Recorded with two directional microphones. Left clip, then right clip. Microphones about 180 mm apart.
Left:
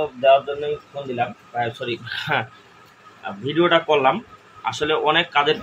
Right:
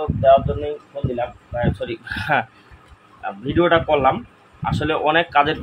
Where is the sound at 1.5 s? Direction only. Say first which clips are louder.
Even; 45° right (ahead or behind).